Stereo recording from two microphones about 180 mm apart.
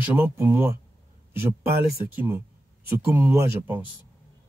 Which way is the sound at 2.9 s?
10° right (ahead or behind).